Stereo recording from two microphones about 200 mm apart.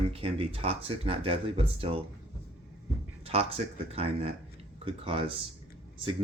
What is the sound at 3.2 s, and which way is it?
Speech, 30° right (ahead or behind).